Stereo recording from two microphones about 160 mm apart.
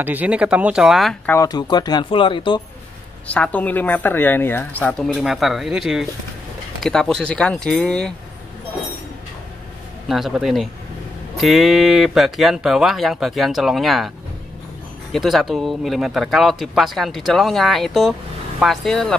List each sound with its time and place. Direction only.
0.0 s speech: 10° right (ahead or behind)
1.2 s speech: 15° left (ahead or behind)
3.3 s speech: 10° left (ahead or behind)
10.0 s speech: centre (ahead or behind)
15.1 s speech: centre (ahead or behind)